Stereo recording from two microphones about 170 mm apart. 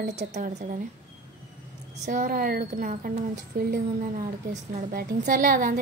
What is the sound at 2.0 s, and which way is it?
A woman's voice, 50° right (ahead or behind).